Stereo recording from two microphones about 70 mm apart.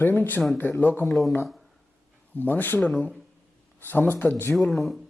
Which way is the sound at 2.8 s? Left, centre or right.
Centre.